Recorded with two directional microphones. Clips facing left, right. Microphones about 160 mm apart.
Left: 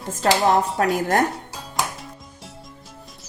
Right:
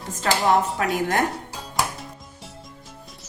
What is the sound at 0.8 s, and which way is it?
Speech, 40° left (ahead or behind).